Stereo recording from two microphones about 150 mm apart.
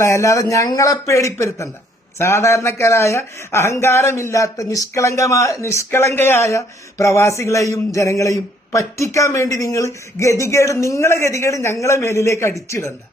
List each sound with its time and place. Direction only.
0.0 s speech: 20° left (ahead or behind)